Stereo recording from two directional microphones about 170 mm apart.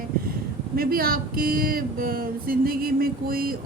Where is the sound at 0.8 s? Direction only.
60° right (ahead or behind).